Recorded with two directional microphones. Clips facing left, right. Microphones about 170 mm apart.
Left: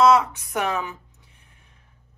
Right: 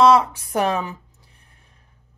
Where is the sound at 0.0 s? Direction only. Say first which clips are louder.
Right 2 dB; 35° right (ahead or behind).